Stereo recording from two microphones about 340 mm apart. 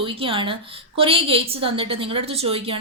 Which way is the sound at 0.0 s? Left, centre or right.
Centre.